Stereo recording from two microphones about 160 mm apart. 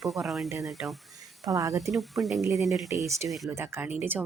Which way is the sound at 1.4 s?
20° right (ahead or behind).